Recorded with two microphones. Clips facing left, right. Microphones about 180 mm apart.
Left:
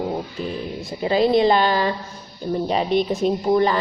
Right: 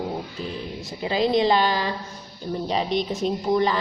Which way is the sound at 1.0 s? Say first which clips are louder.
Left 4 dB; 55° left (ahead or behind).